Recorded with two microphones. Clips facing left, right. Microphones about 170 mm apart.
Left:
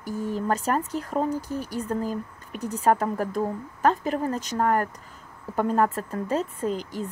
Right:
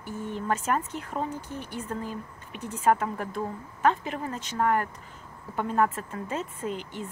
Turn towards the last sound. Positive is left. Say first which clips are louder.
# left 5 dB
turn(degrees=35)  # may be behind; listen again after turning